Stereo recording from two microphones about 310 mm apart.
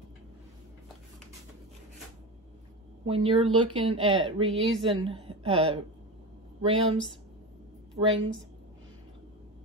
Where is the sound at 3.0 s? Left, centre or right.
Centre.